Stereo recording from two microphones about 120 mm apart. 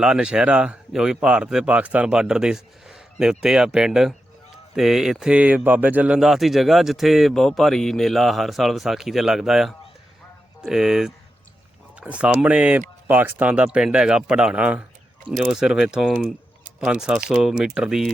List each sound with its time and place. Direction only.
0.0 s a man's voice: 5° right (ahead or behind)